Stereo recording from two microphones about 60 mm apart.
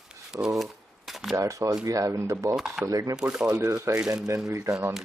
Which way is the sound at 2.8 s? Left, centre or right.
Right.